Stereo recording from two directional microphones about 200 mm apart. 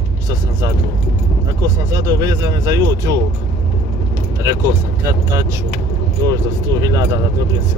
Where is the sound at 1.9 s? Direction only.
20° right (ahead or behind).